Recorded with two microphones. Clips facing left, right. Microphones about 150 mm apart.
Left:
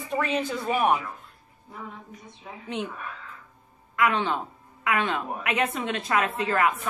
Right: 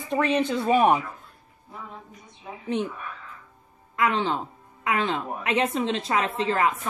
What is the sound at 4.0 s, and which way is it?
A woman's voice, 30° right (ahead or behind).